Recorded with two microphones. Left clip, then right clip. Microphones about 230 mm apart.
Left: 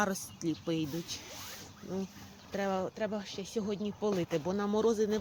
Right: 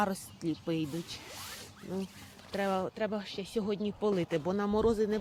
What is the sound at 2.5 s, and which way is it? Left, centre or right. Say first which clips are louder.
Speech: right 1 dB; centre.